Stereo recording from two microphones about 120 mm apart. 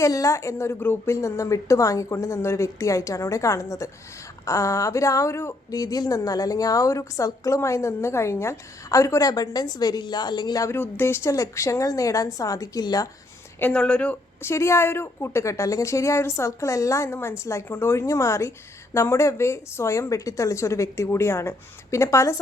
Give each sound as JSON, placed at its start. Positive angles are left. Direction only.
{"t": 0.0, "sound": "a woman's voice", "side_deg": 25}
{"t": 13.6, "sound": "a woman's voice", "side_deg": 10}